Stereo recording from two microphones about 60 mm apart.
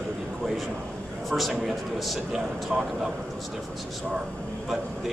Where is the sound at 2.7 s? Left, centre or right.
Centre.